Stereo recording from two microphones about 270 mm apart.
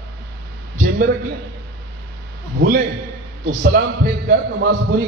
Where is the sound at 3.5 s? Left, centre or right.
Right.